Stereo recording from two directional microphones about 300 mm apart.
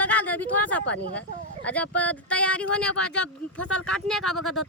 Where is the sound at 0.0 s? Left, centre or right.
Centre.